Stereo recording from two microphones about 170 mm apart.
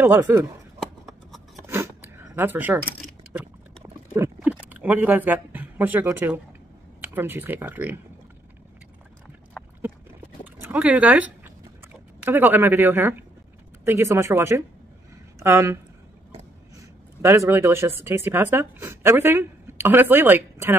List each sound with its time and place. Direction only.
0.0 s speech: 15° right (ahead or behind)
1.7 s a sound: 15° right (ahead or behind)
4.4 s speech: 10° right (ahead or behind)
10.4 s a sound: 10° right (ahead or behind)
13.8 s speech: 15° right (ahead or behind)
17.2 s speech: 15° right (ahead or behind)